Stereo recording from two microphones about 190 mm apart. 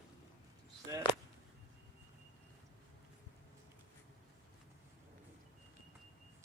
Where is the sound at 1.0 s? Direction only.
25° left (ahead or behind).